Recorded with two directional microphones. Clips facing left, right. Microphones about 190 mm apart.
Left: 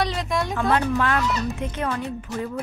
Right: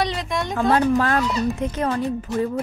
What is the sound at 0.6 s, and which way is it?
Speech, 35° right (ahead or behind).